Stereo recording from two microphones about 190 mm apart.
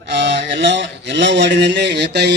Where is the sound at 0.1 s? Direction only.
65° right (ahead or behind).